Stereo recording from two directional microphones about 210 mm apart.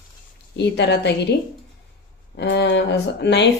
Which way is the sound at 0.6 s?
55° left (ahead or behind).